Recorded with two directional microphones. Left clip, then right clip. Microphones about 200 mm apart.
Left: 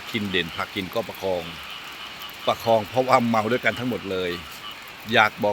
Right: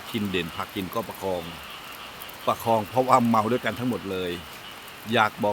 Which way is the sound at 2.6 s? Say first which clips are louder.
Left 3 dB; centre (ahead or behind).